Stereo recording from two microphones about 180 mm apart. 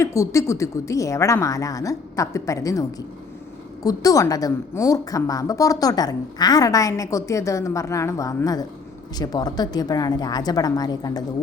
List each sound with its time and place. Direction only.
0.0 s a woman's voice: 15° left (ahead or behind)
3.8 s a woman's voice: 20° left (ahead or behind)